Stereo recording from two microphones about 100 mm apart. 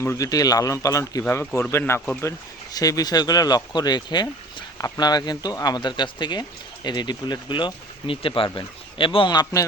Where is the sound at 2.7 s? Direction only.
40° left (ahead or behind).